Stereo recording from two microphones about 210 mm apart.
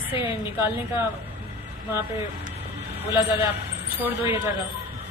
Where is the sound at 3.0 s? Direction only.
10° right (ahead or behind).